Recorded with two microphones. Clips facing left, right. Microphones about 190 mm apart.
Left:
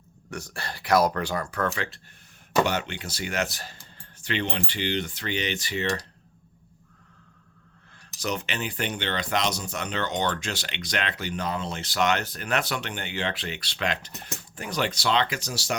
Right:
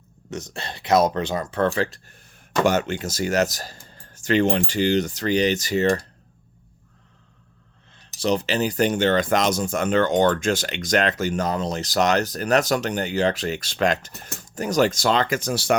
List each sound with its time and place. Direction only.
0.3 s speech: 20° right (ahead or behind); by 6.1 s 45° right (ahead or behind)
7.9 s speech: 30° right (ahead or behind); by 15.7 s 55° right (ahead or behind)